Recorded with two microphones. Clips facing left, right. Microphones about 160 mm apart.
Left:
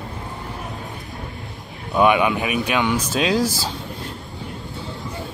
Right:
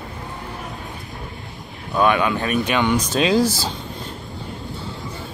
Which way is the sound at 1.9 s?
20° left (ahead or behind).